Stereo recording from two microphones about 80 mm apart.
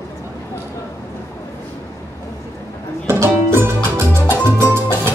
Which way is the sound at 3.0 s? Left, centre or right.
Right.